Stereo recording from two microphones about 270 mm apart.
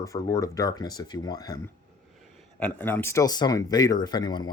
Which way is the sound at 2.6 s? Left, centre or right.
Centre.